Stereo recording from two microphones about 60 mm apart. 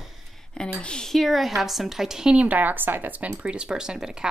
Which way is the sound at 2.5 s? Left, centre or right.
Right.